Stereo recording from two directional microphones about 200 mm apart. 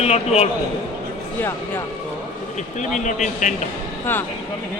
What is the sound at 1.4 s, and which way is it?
Speech, 10° left (ahead or behind).